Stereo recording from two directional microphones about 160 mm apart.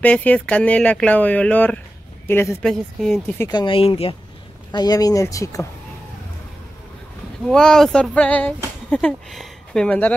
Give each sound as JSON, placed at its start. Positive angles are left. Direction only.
{"t": 0.0, "sound": "speech", "side_deg": 10}
{"t": 2.6, "sound": "speech", "side_deg": 0}
{"t": 3.3, "sound": "speech", "side_deg": 25}
{"t": 4.7, "sound": "speech", "side_deg": 25}
{"t": 7.4, "sound": "speech", "side_deg": 5}